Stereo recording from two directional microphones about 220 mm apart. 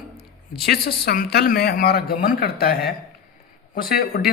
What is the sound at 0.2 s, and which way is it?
Speech, 45° left (ahead or behind).